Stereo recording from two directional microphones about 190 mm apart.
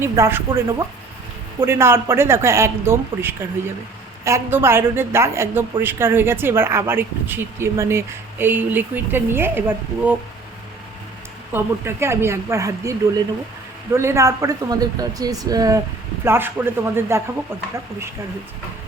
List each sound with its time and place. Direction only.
0.0 s speech: 10° right (ahead or behind)
11.5 s a woman's voice: 15° right (ahead or behind)